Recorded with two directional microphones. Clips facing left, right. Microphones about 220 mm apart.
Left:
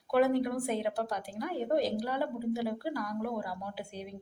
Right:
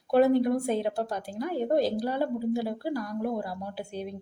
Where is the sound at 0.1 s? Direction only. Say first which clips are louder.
Right 5 dB; 30° right (ahead or behind).